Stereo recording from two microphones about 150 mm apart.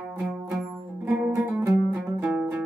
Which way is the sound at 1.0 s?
15° right (ahead or behind).